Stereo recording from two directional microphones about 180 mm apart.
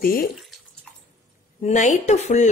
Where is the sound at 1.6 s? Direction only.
40° left (ahead or behind).